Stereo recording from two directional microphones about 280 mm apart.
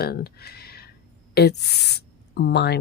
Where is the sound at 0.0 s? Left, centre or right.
Left.